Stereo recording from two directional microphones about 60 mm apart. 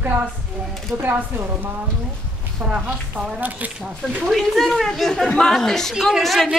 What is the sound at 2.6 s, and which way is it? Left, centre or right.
Speech, centre.